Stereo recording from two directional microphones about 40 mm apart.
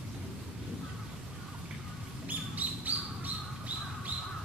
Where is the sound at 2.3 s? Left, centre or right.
Right.